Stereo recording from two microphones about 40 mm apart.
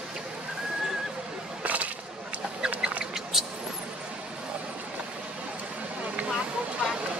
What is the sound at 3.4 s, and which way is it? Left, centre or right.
Vehicle, centre.